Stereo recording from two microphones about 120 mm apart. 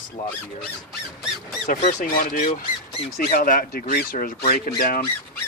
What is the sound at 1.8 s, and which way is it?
Speech, 85° left.